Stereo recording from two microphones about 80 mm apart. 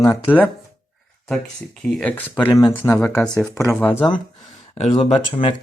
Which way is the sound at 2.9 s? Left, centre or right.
Left.